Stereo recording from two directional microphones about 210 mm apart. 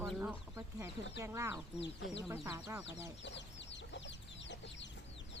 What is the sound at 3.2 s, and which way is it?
Chicken, 60° left (ahead or behind).